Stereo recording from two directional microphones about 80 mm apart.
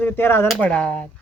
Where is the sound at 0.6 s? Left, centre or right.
Centre.